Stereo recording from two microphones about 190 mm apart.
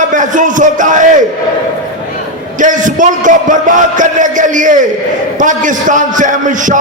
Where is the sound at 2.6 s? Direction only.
40° right (ahead or behind).